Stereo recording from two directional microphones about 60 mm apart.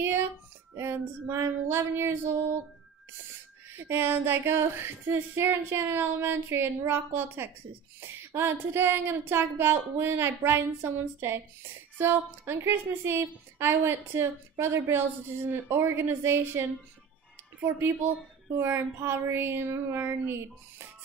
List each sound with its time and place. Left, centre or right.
0.7 s a woman's voice: right
3.7 s a woman's voice: right
17.7 s speech: right